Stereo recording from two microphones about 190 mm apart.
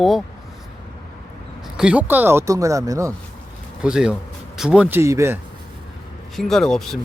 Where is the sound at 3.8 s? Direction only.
5° right (ahead or behind).